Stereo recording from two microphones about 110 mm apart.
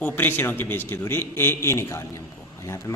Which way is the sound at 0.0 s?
15° left (ahead or behind).